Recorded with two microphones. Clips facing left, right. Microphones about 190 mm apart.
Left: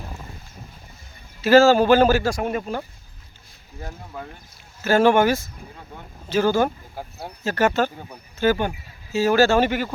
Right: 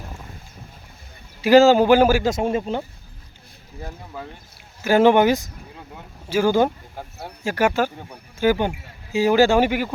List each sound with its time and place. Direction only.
1.4 s speech: 15° right (ahead or behind)
2.3 s speech: 25° right (ahead or behind)
3.8 s speech: 5° right (ahead or behind)
4.8 s speech: 15° right (ahead or behind)